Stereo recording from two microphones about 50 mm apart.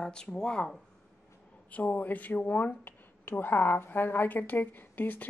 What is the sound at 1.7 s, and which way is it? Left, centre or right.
Speech, left.